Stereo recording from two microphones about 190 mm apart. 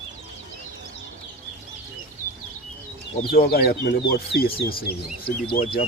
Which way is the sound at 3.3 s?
55° left (ahead or behind).